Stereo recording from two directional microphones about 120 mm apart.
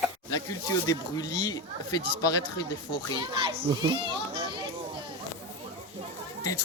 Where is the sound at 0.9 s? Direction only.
35° left (ahead or behind).